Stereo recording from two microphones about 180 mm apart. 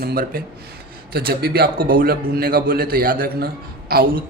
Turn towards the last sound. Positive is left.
turn(degrees=-55)  # may be behind; listen again after turning